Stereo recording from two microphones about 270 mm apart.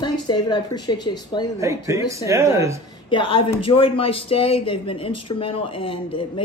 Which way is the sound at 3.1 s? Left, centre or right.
Centre.